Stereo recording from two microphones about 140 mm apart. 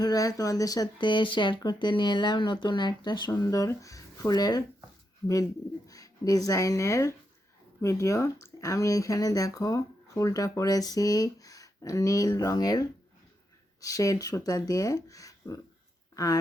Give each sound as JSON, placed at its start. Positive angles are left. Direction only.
{"t": 0.0, "sound": "speech", "side_deg": 25}
{"t": 5.9, "sound": "speech", "side_deg": 25}
{"t": 13.8, "sound": "speech", "side_deg": 25}